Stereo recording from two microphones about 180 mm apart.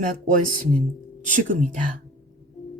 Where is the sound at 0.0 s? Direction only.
50° right (ahead or behind).